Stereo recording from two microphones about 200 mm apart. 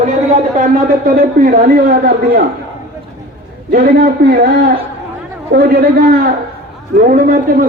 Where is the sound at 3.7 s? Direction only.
50° right (ahead or behind).